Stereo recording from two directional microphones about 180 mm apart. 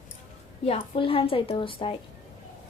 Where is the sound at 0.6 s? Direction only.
30° left (ahead or behind).